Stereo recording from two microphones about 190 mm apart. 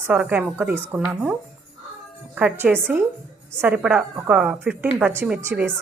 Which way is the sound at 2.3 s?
10° right (ahead or behind).